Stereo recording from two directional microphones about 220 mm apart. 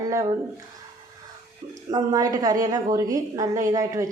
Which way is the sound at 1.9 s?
15° right (ahead or behind).